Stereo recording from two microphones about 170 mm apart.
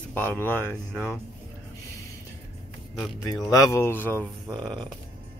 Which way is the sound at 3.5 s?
20° left (ahead or behind).